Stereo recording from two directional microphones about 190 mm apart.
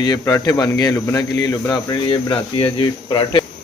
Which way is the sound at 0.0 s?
20° left (ahead or behind).